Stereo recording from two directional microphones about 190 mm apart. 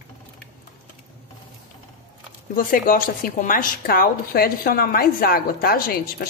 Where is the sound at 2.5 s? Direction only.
50° left (ahead or behind).